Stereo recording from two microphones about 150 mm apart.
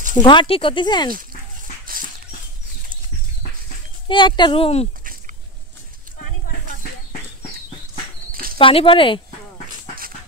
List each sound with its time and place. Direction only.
0.1 s speech: 30° left (ahead or behind)
4.1 s speech: 35° left (ahead or behind)
8.3 s a sound: 75° right (ahead or behind)
8.5 s speech: 35° left (ahead or behind)